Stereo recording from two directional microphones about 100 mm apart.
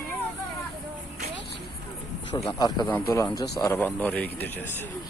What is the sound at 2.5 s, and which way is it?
Speech, 45° left (ahead or behind).